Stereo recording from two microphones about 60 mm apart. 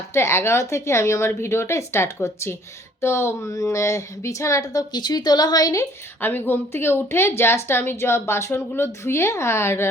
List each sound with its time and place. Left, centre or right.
0.1 s a woman's voice: left
3.4 s speech: left
6.2 s a woman's voice: left